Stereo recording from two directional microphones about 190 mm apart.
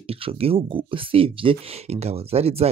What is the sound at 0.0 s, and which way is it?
Speech, 30° right (ahead or behind).